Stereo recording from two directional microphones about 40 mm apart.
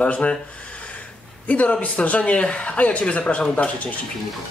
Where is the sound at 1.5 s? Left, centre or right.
Left.